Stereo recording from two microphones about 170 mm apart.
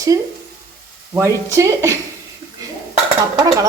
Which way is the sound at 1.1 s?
15° right (ahead or behind).